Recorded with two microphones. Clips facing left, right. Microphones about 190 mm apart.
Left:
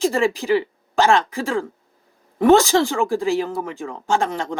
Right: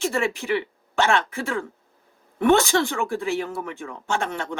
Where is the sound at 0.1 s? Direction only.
35° left (ahead or behind).